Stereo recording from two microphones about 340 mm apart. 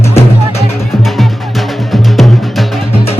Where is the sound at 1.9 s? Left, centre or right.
Centre.